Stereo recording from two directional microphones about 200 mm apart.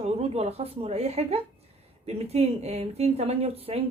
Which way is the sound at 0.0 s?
30° right (ahead or behind).